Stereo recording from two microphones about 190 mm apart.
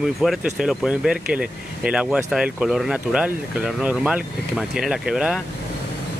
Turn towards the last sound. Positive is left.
turn(degrees=0)  # may be behind; listen again after turning